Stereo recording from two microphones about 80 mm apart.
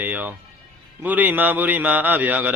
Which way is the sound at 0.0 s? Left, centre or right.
Right.